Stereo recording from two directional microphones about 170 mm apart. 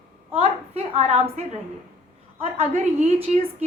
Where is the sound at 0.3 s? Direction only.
35° right (ahead or behind).